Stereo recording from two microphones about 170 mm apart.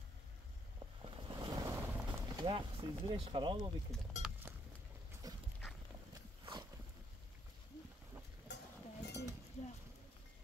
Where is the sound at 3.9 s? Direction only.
Centre (ahead or behind).